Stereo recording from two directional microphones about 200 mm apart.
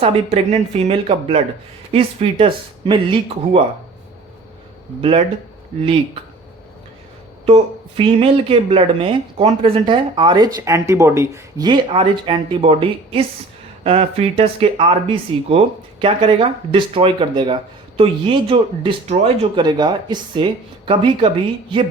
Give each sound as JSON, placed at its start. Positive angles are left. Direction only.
{"t": 0.0, "sound": "speech", "side_deg": -35}
{"t": 4.9, "sound": "speech", "side_deg": -25}
{"t": 7.4, "sound": "speech", "side_deg": -30}
{"t": 19.6, "sound": "speech", "side_deg": -20}